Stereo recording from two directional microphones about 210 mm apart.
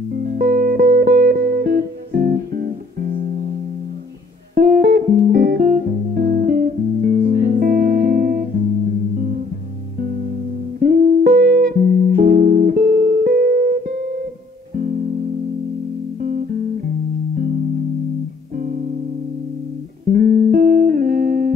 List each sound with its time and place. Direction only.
0.1 s music: 40° right (ahead or behind)
4.6 s music: 40° right (ahead or behind)
10.8 s music: 45° right (ahead or behind)
16.2 s music: 40° right (ahead or behind)
20.1 s music: 45° right (ahead or behind)